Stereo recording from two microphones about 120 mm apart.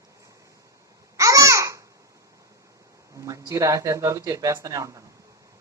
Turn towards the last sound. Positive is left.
turn(degrees=-30)  # may be behind; listen again after turning